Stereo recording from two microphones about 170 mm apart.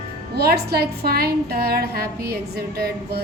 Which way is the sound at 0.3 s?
70° right (ahead or behind).